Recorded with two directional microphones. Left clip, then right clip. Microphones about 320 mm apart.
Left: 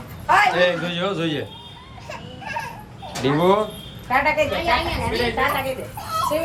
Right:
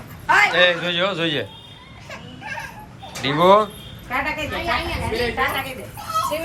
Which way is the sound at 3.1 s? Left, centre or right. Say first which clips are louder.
Right 4 dB; centre.